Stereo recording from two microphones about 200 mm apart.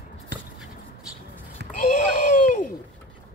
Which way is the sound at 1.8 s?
40° left (ahead or behind).